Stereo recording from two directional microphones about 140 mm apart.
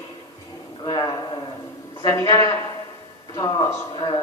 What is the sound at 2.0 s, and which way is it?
A man's voice, 25° left (ahead or behind).